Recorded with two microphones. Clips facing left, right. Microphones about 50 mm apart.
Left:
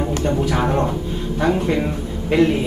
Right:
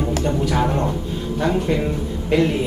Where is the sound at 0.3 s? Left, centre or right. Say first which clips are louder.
Left 2 dB; centre.